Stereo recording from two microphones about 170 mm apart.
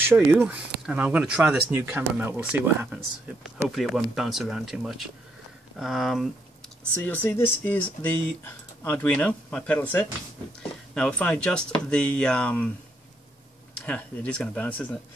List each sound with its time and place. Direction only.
0.0 s speech: 15° right (ahead or behind)
3.4 s speech: centre (ahead or behind)
7.2 s speech: 15° left (ahead or behind)
13.7 s speech: 5° left (ahead or behind)